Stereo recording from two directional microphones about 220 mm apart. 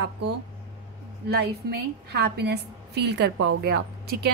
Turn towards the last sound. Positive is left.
turn(degrees=-45)  # may be behind; listen again after turning